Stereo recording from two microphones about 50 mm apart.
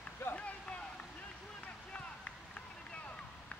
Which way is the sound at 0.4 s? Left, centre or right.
Left.